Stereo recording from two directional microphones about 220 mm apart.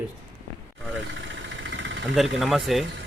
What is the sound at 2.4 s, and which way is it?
Speech, centre (ahead or behind).